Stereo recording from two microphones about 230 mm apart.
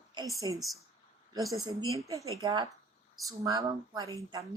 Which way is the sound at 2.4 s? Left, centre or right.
Centre.